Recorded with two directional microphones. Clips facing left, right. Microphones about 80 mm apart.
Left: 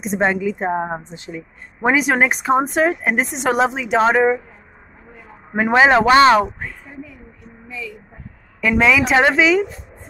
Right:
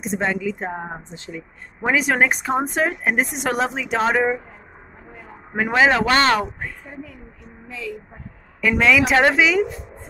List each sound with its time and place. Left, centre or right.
0.2 s a woman's voice: centre
0.7 s speech: left
1.1 s speech: left
2.0 s speech: centre
5.5 s speech: centre
7.6 s a sound: right
8.6 s speech: centre